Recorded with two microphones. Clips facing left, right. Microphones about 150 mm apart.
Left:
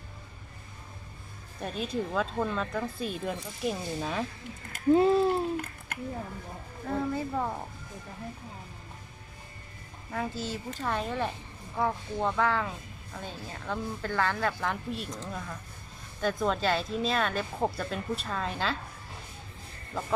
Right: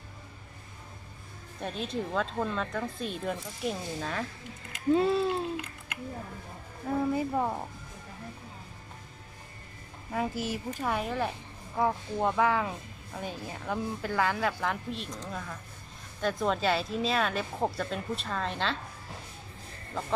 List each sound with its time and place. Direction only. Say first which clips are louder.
1.6 s speech: left 1 dB; centre (ahead or behind)
4.0 s speech: left 3 dB; 15° left (ahead or behind)
4.7 s speech: left 3 dB; 45° left (ahead or behind)
7.1 s speech: right 2 dB; 10° right (ahead or behind)
10.1 s speech: right 2 dB; 15° right (ahead or behind); by 18.8 s 5° left (ahead or behind)